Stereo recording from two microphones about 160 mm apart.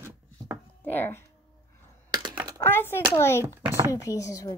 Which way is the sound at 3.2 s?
15° left (ahead or behind).